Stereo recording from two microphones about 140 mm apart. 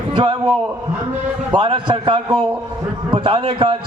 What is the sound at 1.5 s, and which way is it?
A man's voice, 35° right (ahead or behind).